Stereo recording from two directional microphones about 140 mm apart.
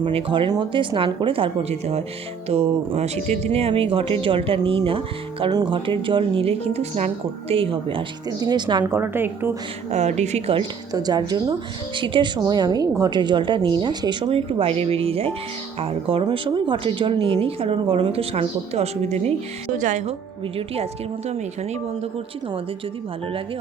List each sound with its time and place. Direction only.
0.0 s speech: 45° right (ahead or behind)
2.5 s a woman's voice: 50° right (ahead or behind); by 8.8 s 30° right (ahead or behind)
8.9 s a woman's voice: 15° right (ahead or behind)
9.9 s a woman's voice: 55° right (ahead or behind)
10.9 s speech: 30° right (ahead or behind); by 19.3 s 50° right (ahead or behind)
19.7 s speech: 60° right (ahead or behind)
21.2 s a woman's voice: 55° right (ahead or behind)